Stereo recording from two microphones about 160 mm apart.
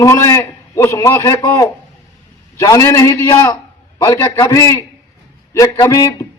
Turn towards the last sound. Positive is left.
turn(degrees=25)  # may be behind; listen again after turning